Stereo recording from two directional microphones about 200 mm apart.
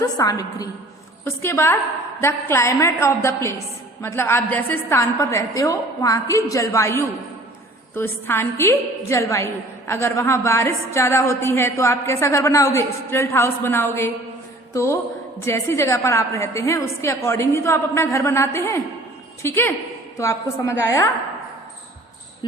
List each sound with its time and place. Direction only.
0.0 s a woman's voice: 15° left (ahead or behind)
14.7 s music: 15° left (ahead or behind)
15.4 s a woman's voice: 15° left (ahead or behind)